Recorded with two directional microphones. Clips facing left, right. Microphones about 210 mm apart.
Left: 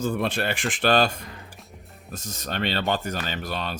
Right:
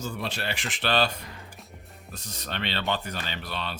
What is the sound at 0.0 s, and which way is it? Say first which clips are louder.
Speech: left 7 dB; 55° left (ahead or behind).